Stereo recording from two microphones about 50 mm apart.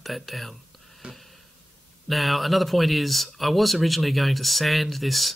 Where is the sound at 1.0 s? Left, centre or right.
Centre.